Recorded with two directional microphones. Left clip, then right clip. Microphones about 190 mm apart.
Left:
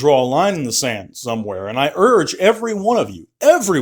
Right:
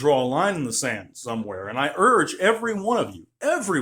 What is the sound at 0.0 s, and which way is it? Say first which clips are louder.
Speech: left 6 dB; 35° left (ahead or behind).